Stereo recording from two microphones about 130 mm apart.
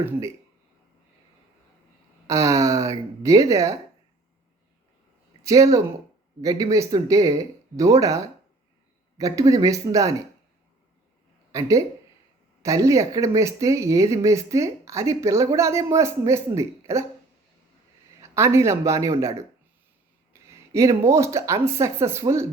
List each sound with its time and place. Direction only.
2.2 s speech: 25° right (ahead or behind)
5.4 s speech: 25° right (ahead or behind)
12.6 s speech: 25° right (ahead or behind)
18.2 s speech: 20° right (ahead or behind)